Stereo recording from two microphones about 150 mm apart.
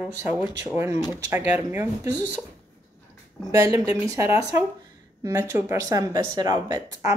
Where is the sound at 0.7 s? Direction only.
20° right (ahead or behind).